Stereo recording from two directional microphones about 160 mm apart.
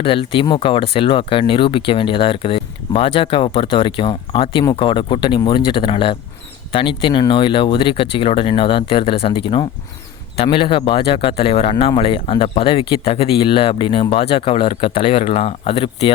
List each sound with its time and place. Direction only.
0.0 s speech: 35° left (ahead or behind)